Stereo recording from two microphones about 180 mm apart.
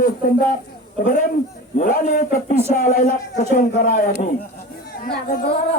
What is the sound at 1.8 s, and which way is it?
Speech, 55° left (ahead or behind).